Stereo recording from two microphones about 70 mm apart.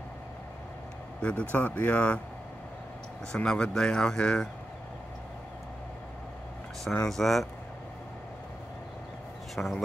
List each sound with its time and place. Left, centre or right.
1.2 s speech: centre
3.3 s speech: centre
7.1 s speech: centre
9.6 s speech: centre